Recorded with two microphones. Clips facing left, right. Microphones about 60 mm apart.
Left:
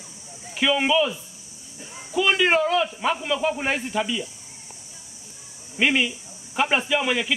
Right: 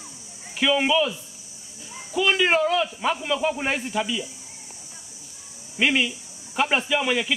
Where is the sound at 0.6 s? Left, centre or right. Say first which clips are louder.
Even; centre.